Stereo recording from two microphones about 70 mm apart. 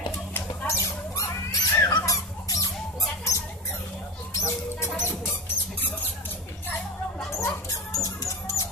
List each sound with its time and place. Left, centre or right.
0.7 s mouse: left
2.0 s squeak: left
4.3 s a sound: left
7.3 s music: left